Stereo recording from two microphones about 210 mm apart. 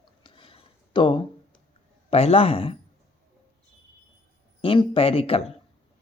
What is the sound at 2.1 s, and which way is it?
Speech, 30° left (ahead or behind).